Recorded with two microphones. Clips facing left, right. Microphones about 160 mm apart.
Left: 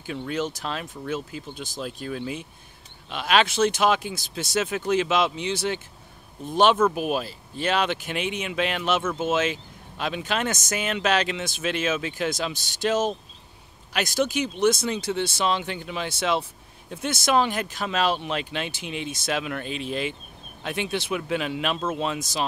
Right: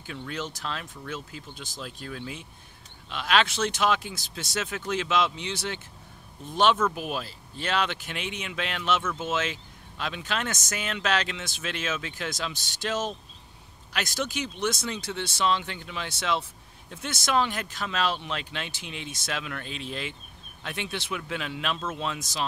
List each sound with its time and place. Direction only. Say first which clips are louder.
0.3 s speech: left 5 dB; 15° left (ahead or behind)
14.2 s speech: left 9 dB; 10° left (ahead or behind)